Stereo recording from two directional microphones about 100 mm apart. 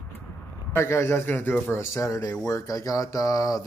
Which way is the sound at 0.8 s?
30° left (ahead or behind).